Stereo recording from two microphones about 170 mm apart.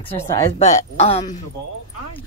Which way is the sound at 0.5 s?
40° left (ahead or behind).